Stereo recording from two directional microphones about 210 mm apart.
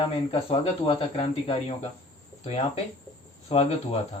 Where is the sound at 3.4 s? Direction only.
30° left (ahead or behind).